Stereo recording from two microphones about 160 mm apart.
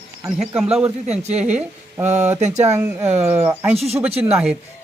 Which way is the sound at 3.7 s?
40° right (ahead or behind).